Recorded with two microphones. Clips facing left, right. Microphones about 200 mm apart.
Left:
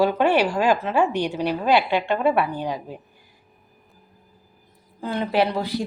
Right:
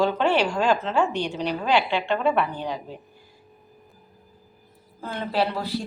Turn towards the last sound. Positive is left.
turn(degrees=15)  # may be behind; listen again after turning